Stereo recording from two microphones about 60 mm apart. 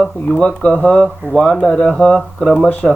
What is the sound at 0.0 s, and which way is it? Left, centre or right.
Speech, centre.